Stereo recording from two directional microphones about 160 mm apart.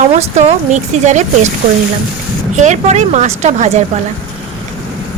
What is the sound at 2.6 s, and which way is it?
Speech, 45° right (ahead or behind).